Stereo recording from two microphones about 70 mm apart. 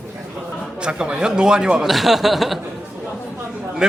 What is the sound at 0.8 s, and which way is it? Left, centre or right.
A man's voice, centre.